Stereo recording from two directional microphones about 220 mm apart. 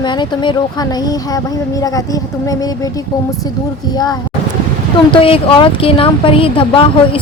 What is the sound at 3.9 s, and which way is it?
Speech, 20° left (ahead or behind).